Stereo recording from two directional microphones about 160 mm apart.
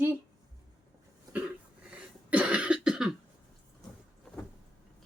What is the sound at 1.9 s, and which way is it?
Cough, 10° right (ahead or behind).